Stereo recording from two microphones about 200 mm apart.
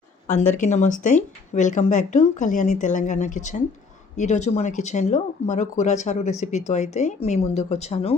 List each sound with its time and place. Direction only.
0.3 s speech: 40° left (ahead or behind)